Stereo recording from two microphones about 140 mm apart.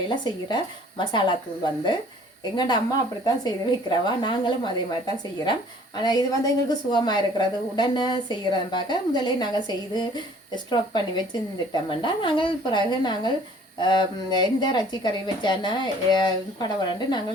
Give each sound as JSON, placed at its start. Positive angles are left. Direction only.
{"t": 0.1, "sound": "a woman's voice", "side_deg": 35}
{"t": 6.0, "sound": "a woman's voice", "side_deg": 30}